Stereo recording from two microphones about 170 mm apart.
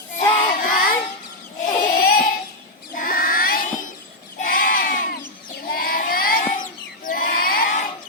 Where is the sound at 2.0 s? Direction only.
55° left (ahead or behind).